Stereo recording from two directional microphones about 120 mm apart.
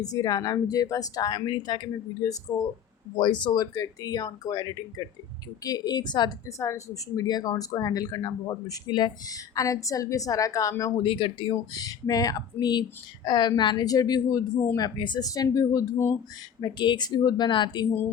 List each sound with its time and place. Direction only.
0.0 s speech: 30° left (ahead or behind)
3.2 s speech: 40° left (ahead or behind)
6.6 s speech: 25° left (ahead or behind)
11.0 s speech: 45° left (ahead or behind); by 16.1 s 30° left (ahead or behind)
16.6 s speech: 40° left (ahead or behind)